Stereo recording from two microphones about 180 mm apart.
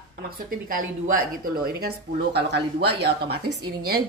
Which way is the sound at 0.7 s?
50° right (ahead or behind).